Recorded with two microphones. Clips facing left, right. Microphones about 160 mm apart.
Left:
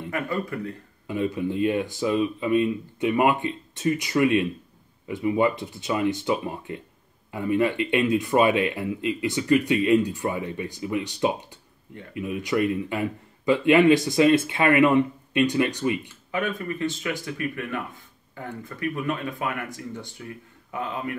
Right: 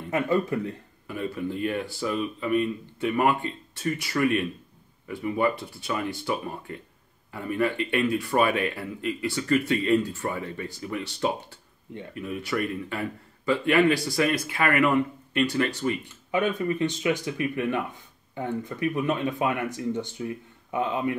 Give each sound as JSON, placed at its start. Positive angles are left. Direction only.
{"t": 0.1, "sound": "speech", "side_deg": -20}
{"t": 1.0, "sound": "speech", "side_deg": 20}
{"t": 16.3, "sound": "speech", "side_deg": -20}